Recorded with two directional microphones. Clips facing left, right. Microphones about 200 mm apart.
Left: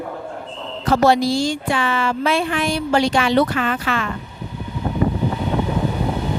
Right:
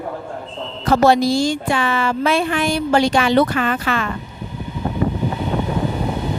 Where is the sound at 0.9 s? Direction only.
50° right (ahead or behind).